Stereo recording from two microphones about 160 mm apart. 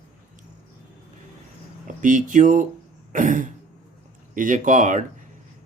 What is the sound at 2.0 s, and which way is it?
Speech, 55° right (ahead or behind).